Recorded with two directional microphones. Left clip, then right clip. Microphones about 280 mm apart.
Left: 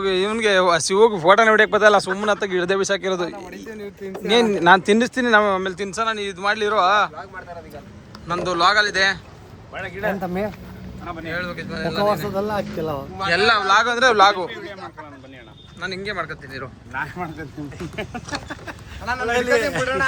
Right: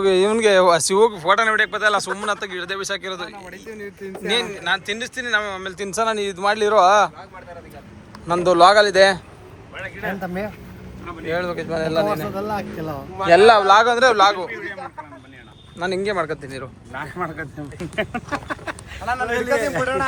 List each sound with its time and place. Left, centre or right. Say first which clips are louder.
0.0 s speech: right 4 dB; centre
1.1 s speech: left 3 dB; left
4.4 s speech: left 9 dB; left; by 7.1 s centre
8.3 s a man's voice: right 5 dB; centre
9.7 s speech: left 3 dB; left
10.2 s speech: left 2 dB; centre
11.3 s a man's voice: right 6 dB; centre
12.3 s speech: left 2 dB; centre
13.1 s a man's voice: right 6 dB; centre
15.8 s speech: right 5 dB; centre
17.9 s a man's voice: right 6 dB; right